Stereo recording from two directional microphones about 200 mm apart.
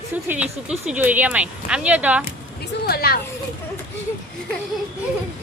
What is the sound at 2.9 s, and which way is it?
Speech, 50° left (ahead or behind).